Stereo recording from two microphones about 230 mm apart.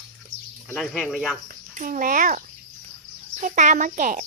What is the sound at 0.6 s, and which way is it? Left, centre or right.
Speech, centre.